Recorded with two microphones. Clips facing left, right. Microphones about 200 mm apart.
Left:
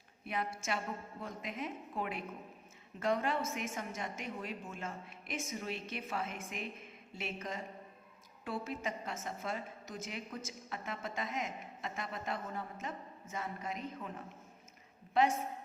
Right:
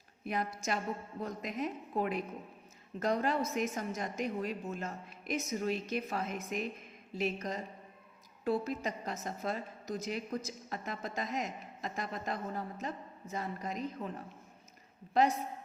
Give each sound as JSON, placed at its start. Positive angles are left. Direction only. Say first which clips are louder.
{"t": 0.3, "sound": "a woman's voice", "louder": "right 3 dB", "side_deg": -40}